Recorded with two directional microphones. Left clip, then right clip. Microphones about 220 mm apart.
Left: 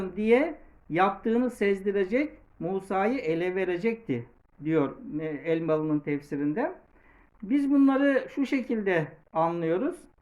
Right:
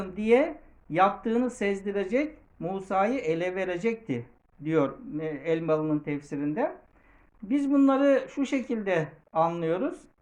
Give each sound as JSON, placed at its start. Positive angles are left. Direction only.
{"t": 0.0, "sound": "speech", "side_deg": 5}